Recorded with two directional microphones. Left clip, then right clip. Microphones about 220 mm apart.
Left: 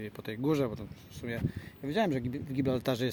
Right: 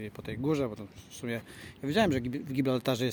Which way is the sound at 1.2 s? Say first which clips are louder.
Right 1 dB; 20° right (ahead or behind).